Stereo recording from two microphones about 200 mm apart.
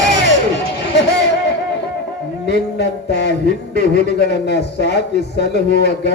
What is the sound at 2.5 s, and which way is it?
Speech, 55° left (ahead or behind).